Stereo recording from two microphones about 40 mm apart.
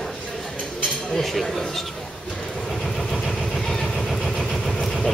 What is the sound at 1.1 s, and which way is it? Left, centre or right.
Speech, centre.